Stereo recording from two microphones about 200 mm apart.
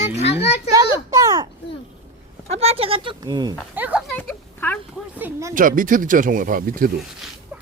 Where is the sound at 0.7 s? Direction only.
15° right (ahead or behind).